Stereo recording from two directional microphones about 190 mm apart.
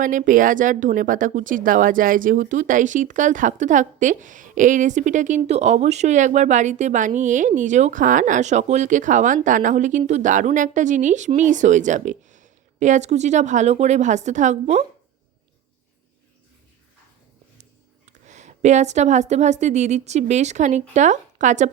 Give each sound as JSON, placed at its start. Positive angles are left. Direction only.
{"t": 0.0, "sound": "speech", "side_deg": -45}
{"t": 17.6, "sound": "a woman's voice", "side_deg": -40}